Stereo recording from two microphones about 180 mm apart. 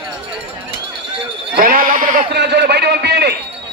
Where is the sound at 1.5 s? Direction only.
50° right (ahead or behind).